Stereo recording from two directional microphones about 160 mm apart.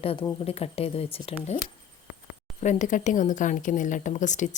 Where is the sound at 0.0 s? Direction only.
35° left (ahead or behind).